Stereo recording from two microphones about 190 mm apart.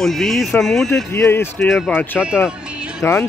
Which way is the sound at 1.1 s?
10° left (ahead or behind).